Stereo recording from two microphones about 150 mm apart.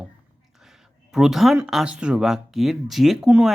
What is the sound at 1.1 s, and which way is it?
Speech, 5° right (ahead or behind).